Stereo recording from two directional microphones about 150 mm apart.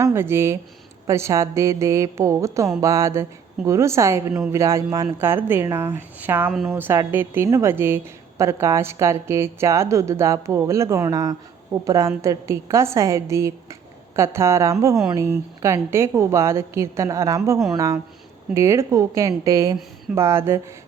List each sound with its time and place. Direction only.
0.0 s a woman's voice: 15° right (ahead or behind)
6.5 s speech: centre (ahead or behind)
6.7 s a woman's voice: 15° right (ahead or behind)